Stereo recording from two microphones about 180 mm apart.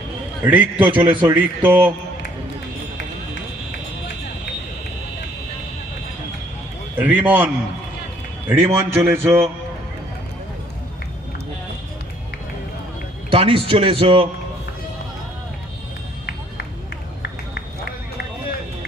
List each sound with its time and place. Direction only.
0.4 s a man's voice: 10° right (ahead or behind)
1.0 s a man's voice: 25° right (ahead or behind)
1.3 s a man's voice: 10° right (ahead or behind)
6.9 s a man's voice: 10° right (ahead or behind)
13.3 s a man's voice: 30° right (ahead or behind)
17.2 s run: 65° left (ahead or behind)